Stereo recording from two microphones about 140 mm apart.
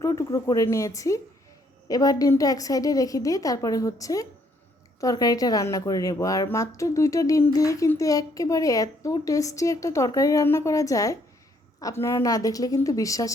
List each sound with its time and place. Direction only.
0.0 s speech: 25° left (ahead or behind)